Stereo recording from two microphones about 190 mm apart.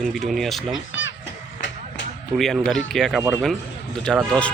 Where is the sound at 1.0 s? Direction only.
90° left.